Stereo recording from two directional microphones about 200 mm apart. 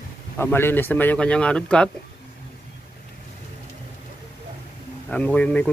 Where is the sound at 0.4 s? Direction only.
10° left (ahead or behind).